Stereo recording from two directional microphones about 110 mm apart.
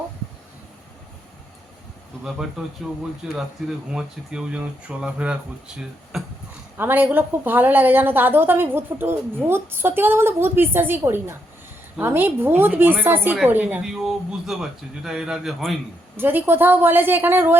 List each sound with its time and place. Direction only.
2.6 s speech: 5° right (ahead or behind)
6.7 s a woman's voice: 20° right (ahead or behind)
13.8 s speech: 5° right (ahead or behind)
16.1 s speech: 20° right (ahead or behind)